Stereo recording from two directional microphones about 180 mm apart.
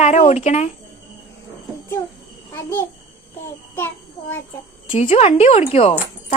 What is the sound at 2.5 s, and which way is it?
Speech, 15° left (ahead or behind).